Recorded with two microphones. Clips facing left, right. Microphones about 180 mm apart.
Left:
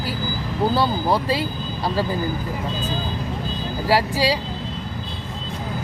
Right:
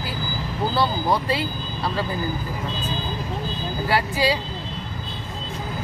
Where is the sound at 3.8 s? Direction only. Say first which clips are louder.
Left 2 dB; 35° left (ahead or behind).